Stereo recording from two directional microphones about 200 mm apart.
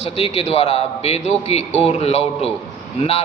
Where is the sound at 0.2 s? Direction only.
30° left (ahead or behind).